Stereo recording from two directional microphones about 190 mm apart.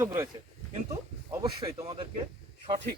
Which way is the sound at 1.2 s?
20° right (ahead or behind).